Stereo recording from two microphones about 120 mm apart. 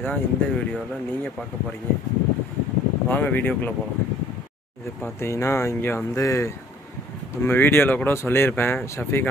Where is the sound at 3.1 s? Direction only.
15° left (ahead or behind).